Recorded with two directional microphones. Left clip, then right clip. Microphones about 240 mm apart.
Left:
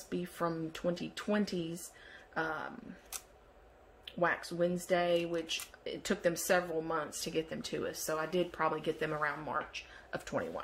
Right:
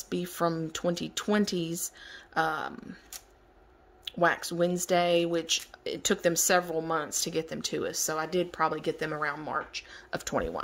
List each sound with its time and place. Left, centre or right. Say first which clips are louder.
0.1 s speech: right 7 dB; right
4.0 s speech: right 7 dB; right